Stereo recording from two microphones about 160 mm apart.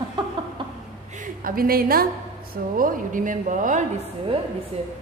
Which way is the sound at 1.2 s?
65° right (ahead or behind).